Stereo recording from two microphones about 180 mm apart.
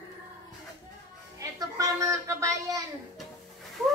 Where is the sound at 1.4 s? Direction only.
20° right (ahead or behind).